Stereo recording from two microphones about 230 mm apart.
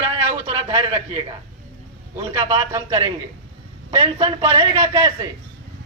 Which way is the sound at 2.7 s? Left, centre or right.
Centre.